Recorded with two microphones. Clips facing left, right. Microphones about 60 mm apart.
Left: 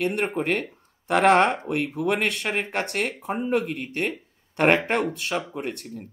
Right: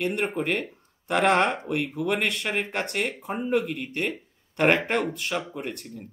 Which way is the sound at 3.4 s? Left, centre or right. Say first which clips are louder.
Even; left.